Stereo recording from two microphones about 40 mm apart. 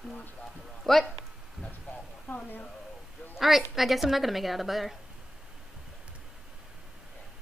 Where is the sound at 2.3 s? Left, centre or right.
Left.